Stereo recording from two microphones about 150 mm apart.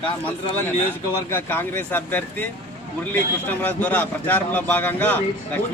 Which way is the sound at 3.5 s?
10° left (ahead or behind).